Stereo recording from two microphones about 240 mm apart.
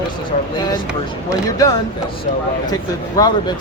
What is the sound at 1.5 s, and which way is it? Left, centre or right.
Speech, centre.